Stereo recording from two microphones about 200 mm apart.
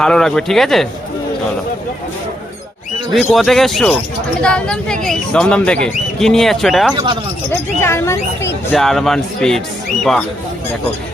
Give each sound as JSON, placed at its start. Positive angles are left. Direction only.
{"t": 0.0, "sound": "speech", "side_deg": 5}
{"t": 3.1, "sound": "speech", "side_deg": 0}
{"t": 6.9, "sound": "speech", "side_deg": -25}
{"t": 7.5, "sound": "speech", "side_deg": 10}
{"t": 8.7, "sound": "speech", "side_deg": 0}